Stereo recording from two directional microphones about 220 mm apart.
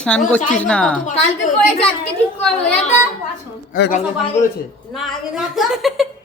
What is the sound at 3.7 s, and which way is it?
Speech, 40° left (ahead or behind).